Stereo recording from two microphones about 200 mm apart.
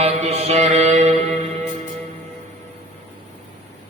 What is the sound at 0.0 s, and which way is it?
Mantra, 30° right (ahead or behind).